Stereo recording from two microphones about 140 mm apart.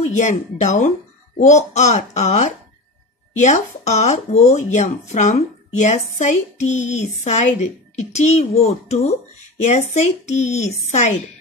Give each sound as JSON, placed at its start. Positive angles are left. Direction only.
{"t": 0.0, "sound": "a child's voice", "side_deg": 60}